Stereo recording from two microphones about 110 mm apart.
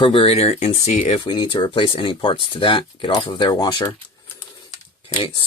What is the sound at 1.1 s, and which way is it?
Speech, 45° left (ahead or behind).